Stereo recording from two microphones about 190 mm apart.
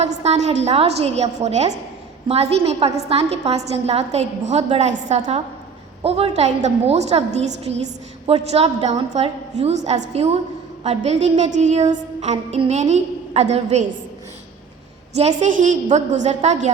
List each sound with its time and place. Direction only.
0.0 s a woman's voice: 35° right (ahead or behind)
15.1 s a woman's voice: 35° right (ahead or behind)